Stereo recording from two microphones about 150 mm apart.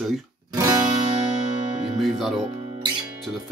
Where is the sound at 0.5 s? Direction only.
25° right (ahead or behind).